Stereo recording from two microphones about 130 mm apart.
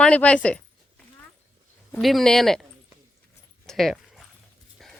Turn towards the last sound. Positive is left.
turn(degrees=0)  # may be behind; listen again after turning